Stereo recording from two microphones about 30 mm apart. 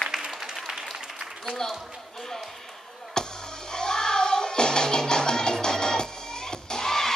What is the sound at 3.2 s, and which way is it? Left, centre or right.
Music, centre.